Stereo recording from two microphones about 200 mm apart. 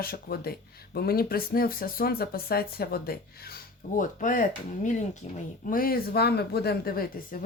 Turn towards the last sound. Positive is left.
turn(degrees=50)  # may be behind; listen again after turning